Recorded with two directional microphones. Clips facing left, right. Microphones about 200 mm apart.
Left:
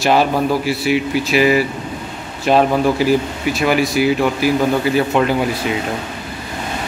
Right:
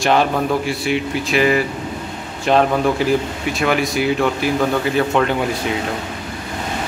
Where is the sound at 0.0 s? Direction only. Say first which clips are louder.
Left 2 dB; 5° left (ahead or behind).